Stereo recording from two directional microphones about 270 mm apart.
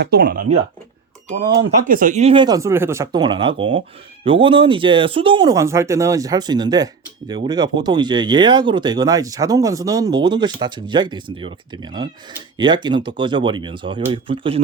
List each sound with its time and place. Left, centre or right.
0.0 s speech: right